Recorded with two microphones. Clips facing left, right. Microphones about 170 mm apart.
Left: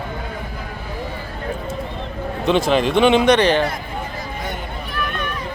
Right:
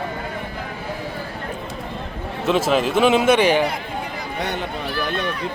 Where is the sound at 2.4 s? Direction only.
Centre (ahead or behind).